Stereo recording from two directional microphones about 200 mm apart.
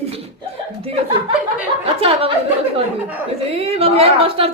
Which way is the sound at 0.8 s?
30° right (ahead or behind).